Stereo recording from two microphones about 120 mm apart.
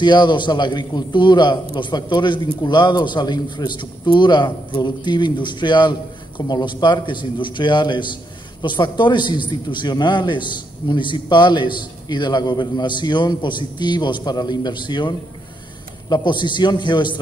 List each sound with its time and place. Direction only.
0.0 s a man's voice: 40° left (ahead or behind)